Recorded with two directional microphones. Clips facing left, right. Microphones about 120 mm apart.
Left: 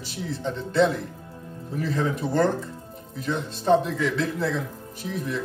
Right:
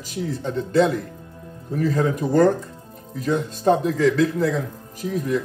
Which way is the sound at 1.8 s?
45° right (ahead or behind).